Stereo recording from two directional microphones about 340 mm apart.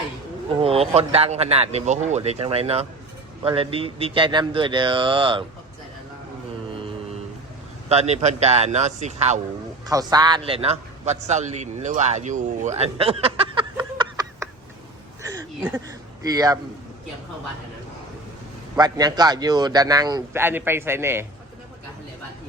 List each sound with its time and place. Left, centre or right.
0.6 s a man's voice: centre
7.9 s a man's voice: centre
15.2 s a sound: centre
16.2 s a man's voice: centre
18.8 s a man's voice: centre